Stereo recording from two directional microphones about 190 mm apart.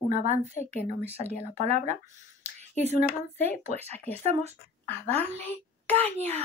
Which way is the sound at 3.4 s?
35° right (ahead or behind).